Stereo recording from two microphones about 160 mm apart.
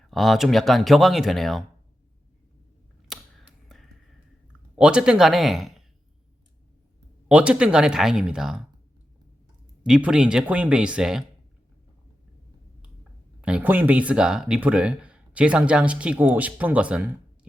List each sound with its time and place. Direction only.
0.0 s speech: centre (ahead or behind)
3.1 s camera: centre (ahead or behind)
4.8 s speech: 5° right (ahead or behind)
7.3 s speech: 5° right (ahead or behind)
9.8 s speech: 5° right (ahead or behind)
13.4 s speech: 10° right (ahead or behind)